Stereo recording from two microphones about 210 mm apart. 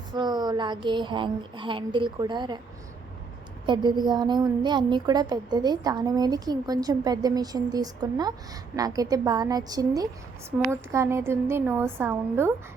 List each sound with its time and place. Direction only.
0.1 s a sound: 20° right (ahead or behind)
0.9 s a woman's voice: 20° right (ahead or behind)
3.7 s a woman's voice: 20° right (ahead or behind)